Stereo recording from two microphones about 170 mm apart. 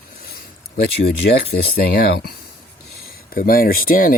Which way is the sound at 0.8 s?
70° left (ahead or behind).